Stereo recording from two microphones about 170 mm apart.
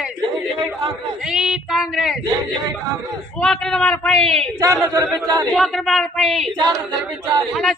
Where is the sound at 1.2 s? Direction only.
5° right (ahead or behind).